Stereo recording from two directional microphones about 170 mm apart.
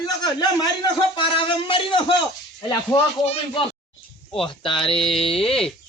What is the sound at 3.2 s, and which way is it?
Speech, 40° left (ahead or behind).